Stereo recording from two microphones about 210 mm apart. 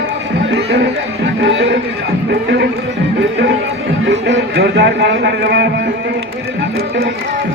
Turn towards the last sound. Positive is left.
turn(degrees=-50)  # may be behind; listen again after turning